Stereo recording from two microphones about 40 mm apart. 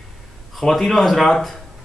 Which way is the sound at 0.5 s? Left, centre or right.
Centre.